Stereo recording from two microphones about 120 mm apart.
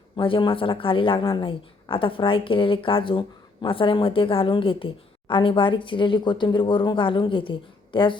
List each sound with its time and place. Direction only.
0.2 s speech: 45° left (ahead or behind)